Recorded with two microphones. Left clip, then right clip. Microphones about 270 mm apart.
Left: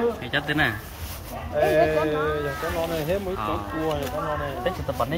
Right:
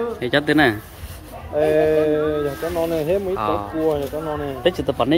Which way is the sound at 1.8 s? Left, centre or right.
Right.